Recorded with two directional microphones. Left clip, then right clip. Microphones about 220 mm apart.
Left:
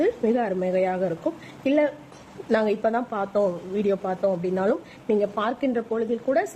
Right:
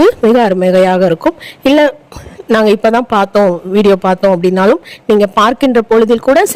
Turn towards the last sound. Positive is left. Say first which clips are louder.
# right 16 dB
turn(degrees=-45)  # may be behind; listen again after turning